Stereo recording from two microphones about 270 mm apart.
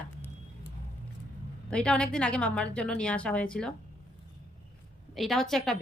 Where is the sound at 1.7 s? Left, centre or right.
Centre.